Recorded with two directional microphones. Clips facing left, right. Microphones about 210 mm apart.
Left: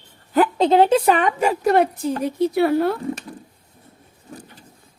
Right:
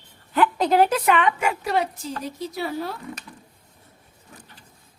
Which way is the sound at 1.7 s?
55° left (ahead or behind).